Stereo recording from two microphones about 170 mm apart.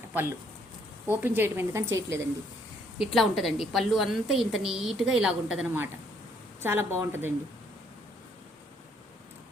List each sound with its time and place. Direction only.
0.1 s speech: 10° right (ahead or behind)
3.0 s a woman's voice: centre (ahead or behind)